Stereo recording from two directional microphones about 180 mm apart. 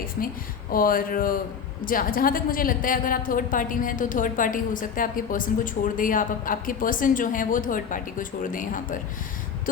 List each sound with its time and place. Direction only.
0.2 s a woman's voice: 50° left (ahead or behind)